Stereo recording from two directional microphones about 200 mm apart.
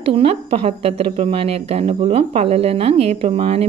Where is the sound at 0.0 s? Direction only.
30° right (ahead or behind).